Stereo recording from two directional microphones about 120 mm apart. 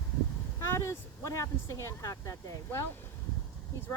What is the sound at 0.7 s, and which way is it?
Speech, 25° left (ahead or behind).